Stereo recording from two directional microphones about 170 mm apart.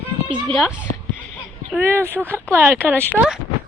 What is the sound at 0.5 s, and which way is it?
Speech, centre (ahead or behind).